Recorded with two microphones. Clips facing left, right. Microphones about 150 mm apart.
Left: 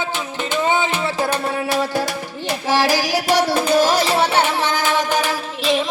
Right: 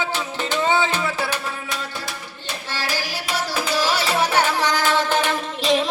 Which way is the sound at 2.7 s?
90° left.